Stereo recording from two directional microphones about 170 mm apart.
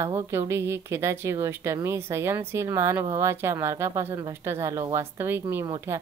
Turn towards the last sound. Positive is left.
turn(degrees=-15)  # may be behind; listen again after turning